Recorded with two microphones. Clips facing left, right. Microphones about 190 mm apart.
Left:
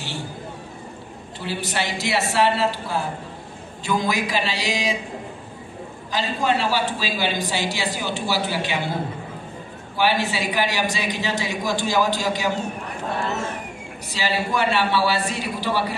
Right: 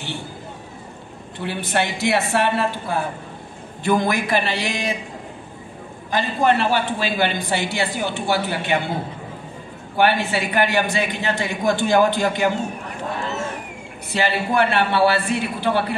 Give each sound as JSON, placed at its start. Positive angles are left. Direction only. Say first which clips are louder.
{"t": 1.4, "sound": "a man's voice", "louder": "right 4 dB", "side_deg": -55}
{"t": 6.0, "sound": "a man's voice", "louder": "right 4 dB", "side_deg": -55}
{"t": 9.9, "sound": "a man's voice", "louder": "right 3 dB", "side_deg": -55}
{"t": 14.1, "sound": "a man's voice", "louder": "right 4 dB", "side_deg": -55}